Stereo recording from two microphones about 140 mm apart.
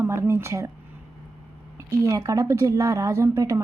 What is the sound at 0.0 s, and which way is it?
Speech, 20° right (ahead or behind).